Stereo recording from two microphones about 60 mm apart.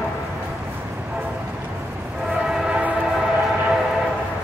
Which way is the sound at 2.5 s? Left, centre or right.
Centre.